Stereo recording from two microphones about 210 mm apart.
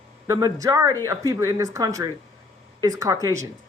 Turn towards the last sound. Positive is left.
turn(degrees=-15)  # may be behind; listen again after turning